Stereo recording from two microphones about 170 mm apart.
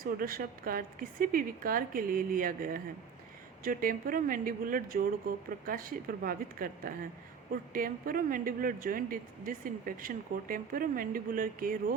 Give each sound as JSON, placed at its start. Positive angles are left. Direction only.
{"t": 0.0, "sound": "a woman's voice", "side_deg": -55}